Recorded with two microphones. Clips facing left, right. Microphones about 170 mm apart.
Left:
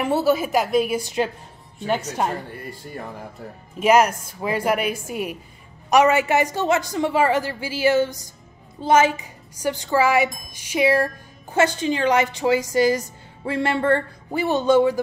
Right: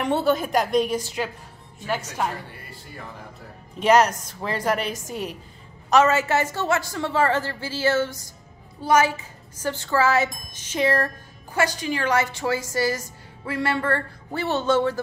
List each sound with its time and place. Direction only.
0.0 s a woman's voice: 5° left (ahead or behind)
3.8 s a woman's voice: 10° left (ahead or behind)
11.5 s a woman's voice: 25° left (ahead or behind)